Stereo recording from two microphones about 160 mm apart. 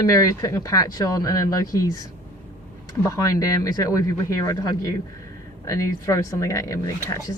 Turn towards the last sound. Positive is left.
turn(degrees=20)  # may be behind; listen again after turning